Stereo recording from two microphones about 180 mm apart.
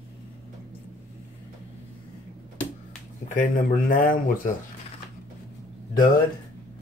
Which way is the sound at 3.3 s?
45° left (ahead or behind).